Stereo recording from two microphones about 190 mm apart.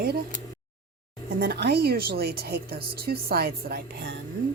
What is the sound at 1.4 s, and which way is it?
Speech, 55° right (ahead or behind).